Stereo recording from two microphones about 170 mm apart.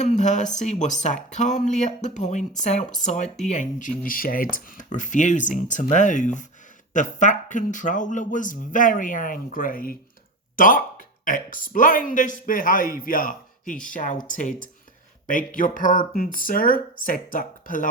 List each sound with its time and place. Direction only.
0.0 s speech: 45° left (ahead or behind)